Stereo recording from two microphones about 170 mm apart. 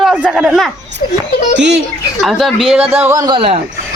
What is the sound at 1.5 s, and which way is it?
Speech, 90° right.